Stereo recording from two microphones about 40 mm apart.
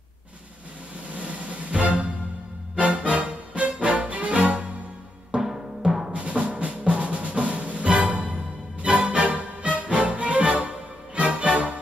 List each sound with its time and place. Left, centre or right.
1.7 s music: right
5.3 s music: centre
6.1 s music: right